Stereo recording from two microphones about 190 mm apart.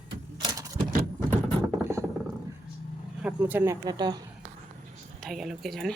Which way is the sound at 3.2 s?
10° right (ahead or behind).